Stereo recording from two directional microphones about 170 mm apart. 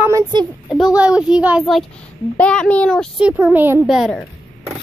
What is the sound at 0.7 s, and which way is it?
A child's voice, centre (ahead or behind).